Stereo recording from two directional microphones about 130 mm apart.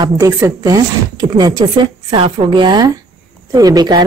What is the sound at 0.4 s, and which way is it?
Speech, 30° right (ahead or behind).